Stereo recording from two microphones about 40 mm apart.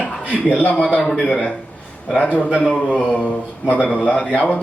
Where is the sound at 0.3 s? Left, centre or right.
Left.